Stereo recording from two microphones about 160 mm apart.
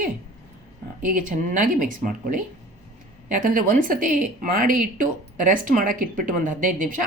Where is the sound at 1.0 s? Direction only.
55° right (ahead or behind).